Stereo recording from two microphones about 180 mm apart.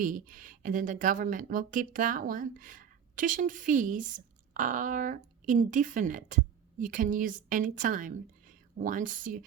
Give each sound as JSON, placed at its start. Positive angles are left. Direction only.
{"t": 0.0, "sound": "speech", "side_deg": -50}